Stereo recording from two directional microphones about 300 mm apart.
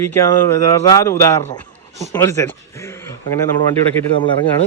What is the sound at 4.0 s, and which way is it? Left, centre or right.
Speech, centre.